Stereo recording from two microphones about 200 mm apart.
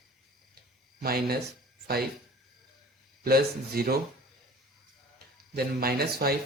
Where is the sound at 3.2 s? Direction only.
50° right (ahead or behind).